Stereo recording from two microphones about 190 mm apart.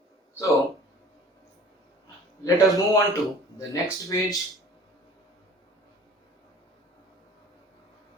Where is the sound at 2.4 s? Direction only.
20° left (ahead or behind).